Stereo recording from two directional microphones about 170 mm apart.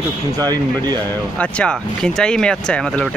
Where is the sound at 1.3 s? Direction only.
5° left (ahead or behind).